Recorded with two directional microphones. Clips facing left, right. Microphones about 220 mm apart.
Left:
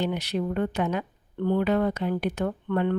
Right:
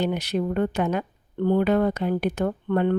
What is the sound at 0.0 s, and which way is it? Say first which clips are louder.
Speech: right 3 dB; 45° right (ahead or behind).